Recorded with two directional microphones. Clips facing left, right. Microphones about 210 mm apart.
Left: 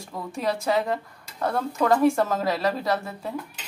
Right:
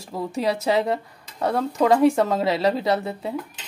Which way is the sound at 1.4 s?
20° right (ahead or behind).